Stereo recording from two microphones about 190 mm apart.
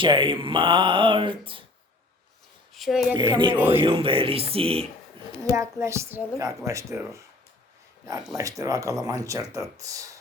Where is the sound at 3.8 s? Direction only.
25° right (ahead or behind).